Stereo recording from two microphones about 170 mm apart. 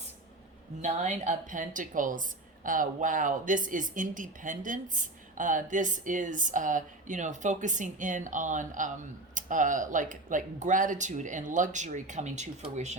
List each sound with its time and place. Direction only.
0.8 s speech: 45° right (ahead or behind)